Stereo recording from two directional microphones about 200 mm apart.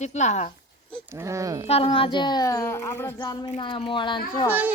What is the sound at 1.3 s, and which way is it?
Speech, 15° right (ahead or behind).